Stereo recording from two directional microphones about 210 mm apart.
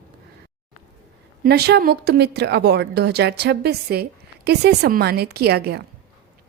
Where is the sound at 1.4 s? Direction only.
50° right (ahead or behind).